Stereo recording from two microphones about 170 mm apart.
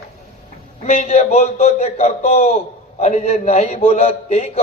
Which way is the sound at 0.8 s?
40° left (ahead or behind).